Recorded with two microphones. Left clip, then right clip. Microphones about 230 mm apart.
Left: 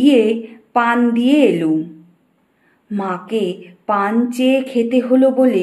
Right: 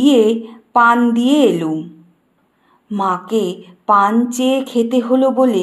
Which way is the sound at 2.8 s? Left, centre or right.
Centre.